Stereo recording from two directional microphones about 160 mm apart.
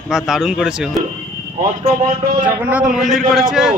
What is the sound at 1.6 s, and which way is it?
Speech, 45° right (ahead or behind).